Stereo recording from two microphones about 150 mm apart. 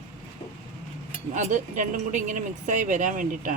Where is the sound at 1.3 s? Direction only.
55° right (ahead or behind).